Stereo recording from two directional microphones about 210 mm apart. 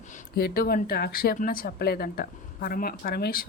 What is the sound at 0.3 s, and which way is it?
Speech, 45° left (ahead or behind).